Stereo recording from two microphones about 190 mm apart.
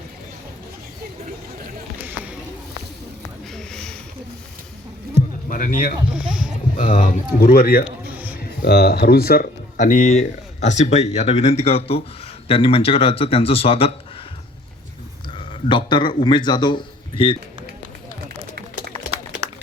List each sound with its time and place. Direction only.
5.5 s speech: 45° left (ahead or behind)
6.1 s speech: 5° right (ahead or behind)
6.7 s speech: 45° left (ahead or behind)
7.9 s a sound: 10° right (ahead or behind)
8.6 s speech: 55° left (ahead or behind); by 13.9 s 30° left (ahead or behind)
15.7 s a man's voice: 25° left (ahead or behind)